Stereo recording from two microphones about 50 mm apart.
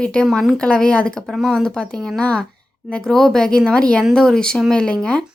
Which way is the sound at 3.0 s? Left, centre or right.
Centre.